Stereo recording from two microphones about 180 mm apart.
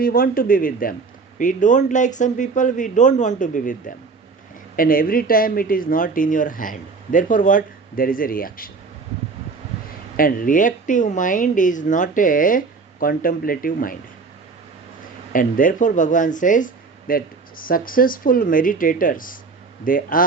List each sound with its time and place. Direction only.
0.0 s speech: 55° left (ahead or behind)
10.2 s speech: 50° left (ahead or behind)
15.3 s speech: 50° left (ahead or behind)